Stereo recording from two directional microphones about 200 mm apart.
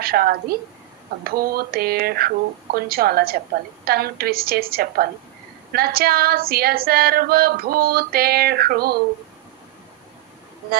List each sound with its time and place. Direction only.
0.0 s female singing: 50° right (ahead or behind)